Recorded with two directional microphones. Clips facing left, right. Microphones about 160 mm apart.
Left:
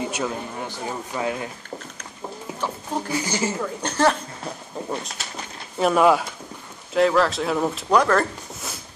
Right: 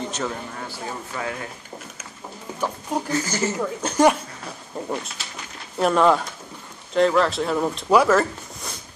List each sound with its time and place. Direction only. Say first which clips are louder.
0.0 s speech: left 2 dB; 10° left (ahead or behind)
3.1 s speech: even; 10° left (ahead or behind)
3.5 s speech: right 3 dB; 10° right (ahead or behind)
8.0 s a sound: right 2 dB; 5° right (ahead or behind)